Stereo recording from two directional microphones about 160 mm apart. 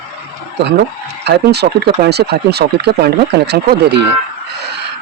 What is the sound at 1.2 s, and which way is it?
Speech, 90° right.